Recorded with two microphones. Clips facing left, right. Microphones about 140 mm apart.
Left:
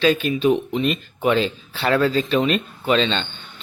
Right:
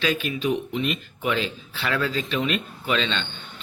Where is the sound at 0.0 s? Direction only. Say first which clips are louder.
Left 7 dB; 30° left (ahead or behind).